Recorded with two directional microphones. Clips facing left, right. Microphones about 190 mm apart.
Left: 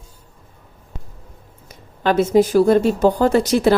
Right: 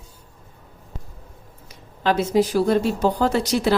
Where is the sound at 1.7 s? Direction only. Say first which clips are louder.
Left 3 dB; 50° left (ahead or behind).